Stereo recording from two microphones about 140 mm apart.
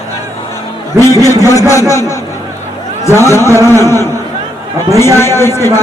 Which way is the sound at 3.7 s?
20° left (ahead or behind).